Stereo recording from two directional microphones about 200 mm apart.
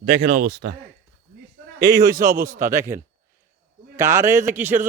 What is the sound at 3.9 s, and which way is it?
Speech, 15° right (ahead or behind).